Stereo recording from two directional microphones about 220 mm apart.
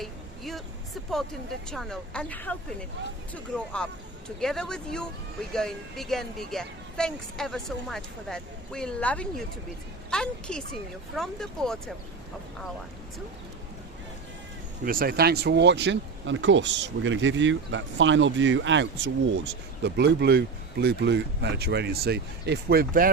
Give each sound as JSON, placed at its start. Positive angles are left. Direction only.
{"t": 0.0, "sound": "a sound", "side_deg": 0}
{"t": 1.1, "sound": "a woman's voice", "side_deg": 0}
{"t": 4.4, "sound": "a woman's voice", "side_deg": 0}
{"t": 14.8, "sound": "speech", "side_deg": -40}